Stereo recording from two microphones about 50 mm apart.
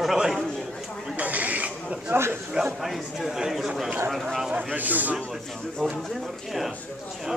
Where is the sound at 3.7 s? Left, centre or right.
Centre.